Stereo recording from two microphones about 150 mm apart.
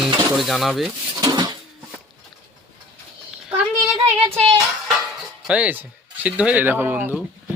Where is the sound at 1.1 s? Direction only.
25° right (ahead or behind).